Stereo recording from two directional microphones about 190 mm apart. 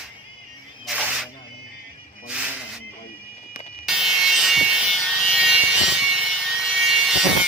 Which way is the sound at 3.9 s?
5° right (ahead or behind).